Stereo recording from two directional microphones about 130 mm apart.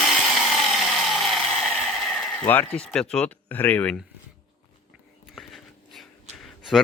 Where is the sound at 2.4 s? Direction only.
10° left (ahead or behind).